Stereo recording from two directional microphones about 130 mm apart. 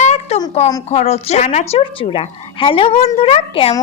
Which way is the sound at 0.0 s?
65° left (ahead or behind).